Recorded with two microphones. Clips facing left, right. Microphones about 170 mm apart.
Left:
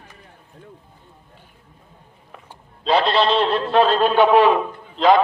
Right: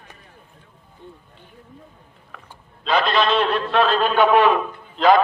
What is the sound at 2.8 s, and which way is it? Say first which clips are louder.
A man's voice: left 2 dB; 30° left (ahead or behind).